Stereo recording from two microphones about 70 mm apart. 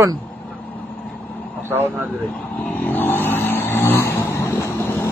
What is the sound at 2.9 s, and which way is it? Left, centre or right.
Vehicle, left.